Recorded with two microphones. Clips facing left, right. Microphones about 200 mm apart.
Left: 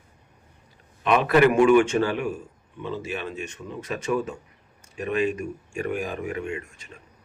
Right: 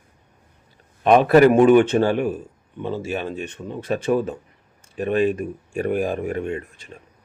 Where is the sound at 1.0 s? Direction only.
35° right (ahead or behind).